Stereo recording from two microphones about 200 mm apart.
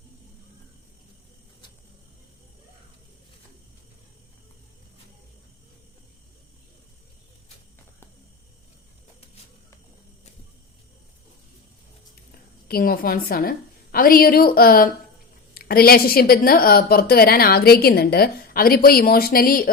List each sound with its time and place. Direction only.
12.6 s a woman's voice: 50° left (ahead or behind)